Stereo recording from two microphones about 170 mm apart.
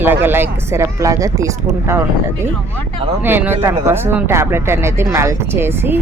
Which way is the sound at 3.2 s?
10° right (ahead or behind).